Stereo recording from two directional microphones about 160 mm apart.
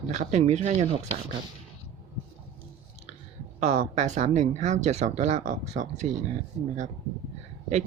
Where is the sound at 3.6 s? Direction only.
45° right (ahead or behind).